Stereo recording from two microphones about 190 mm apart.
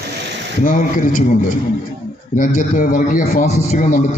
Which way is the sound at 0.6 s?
45° left (ahead or behind).